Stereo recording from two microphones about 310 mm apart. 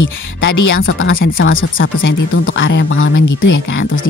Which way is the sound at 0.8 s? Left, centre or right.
Left.